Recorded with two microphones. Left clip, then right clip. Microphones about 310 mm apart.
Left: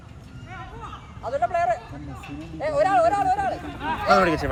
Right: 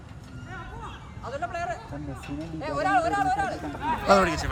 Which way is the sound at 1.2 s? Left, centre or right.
Centre.